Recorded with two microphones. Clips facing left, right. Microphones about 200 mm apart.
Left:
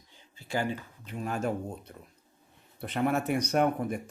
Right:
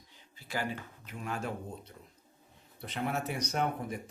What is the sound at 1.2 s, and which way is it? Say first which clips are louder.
Speech: left 5 dB; 40° left (ahead or behind).